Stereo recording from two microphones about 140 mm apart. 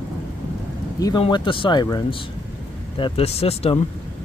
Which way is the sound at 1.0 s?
30° left (ahead or behind).